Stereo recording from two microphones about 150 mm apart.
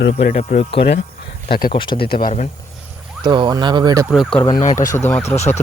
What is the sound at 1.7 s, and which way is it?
Speech, 35° left (ahead or behind).